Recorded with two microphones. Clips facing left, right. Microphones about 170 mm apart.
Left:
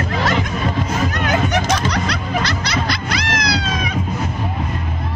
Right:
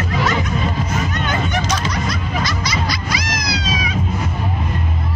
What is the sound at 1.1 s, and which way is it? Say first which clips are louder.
Music: left 3 dB; 90° left.